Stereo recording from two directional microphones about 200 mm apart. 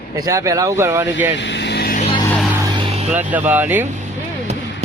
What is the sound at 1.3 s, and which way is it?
Vehicle, 60° left (ahead or behind).